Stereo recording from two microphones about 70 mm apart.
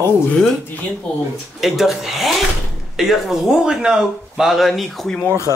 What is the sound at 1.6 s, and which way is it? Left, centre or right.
Speech, centre.